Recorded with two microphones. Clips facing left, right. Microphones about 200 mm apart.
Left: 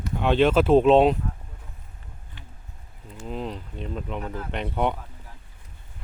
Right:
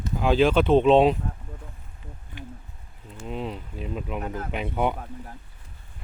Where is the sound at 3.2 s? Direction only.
Centre (ahead or behind).